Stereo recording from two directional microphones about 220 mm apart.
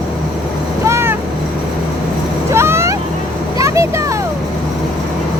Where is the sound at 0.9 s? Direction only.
10° right (ahead or behind).